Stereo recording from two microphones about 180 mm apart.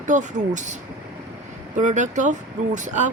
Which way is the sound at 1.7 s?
40° right (ahead or behind).